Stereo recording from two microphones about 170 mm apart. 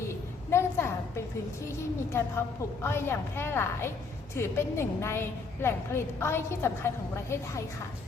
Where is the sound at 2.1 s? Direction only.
15° left (ahead or behind).